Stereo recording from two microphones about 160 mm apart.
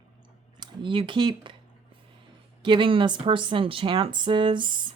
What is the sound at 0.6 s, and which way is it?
Speech, 30° right (ahead or behind).